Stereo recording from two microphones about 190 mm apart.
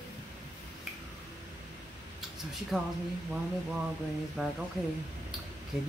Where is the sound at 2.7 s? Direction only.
5° right (ahead or behind).